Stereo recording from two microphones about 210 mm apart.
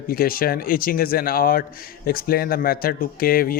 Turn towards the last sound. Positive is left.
turn(degrees=45)  # may be behind; listen again after turning